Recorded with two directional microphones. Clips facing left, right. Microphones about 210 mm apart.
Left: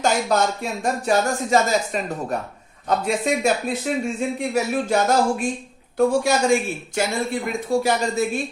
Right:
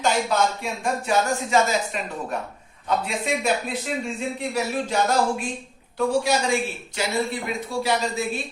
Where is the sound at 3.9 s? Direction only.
50° left (ahead or behind).